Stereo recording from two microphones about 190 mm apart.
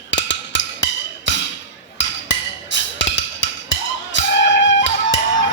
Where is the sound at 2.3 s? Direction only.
75° left (ahead or behind).